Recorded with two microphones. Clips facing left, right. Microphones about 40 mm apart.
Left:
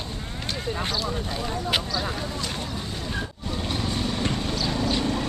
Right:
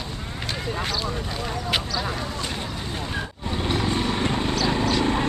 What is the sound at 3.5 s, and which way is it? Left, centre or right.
Vehicle, right.